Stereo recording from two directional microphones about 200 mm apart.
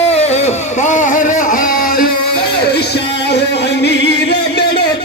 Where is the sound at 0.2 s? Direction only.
35° left (ahead or behind); by 4.6 s 60° left (ahead or behind).